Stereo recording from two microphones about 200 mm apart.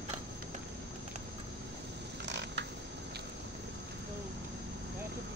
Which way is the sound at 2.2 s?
60° right (ahead or behind).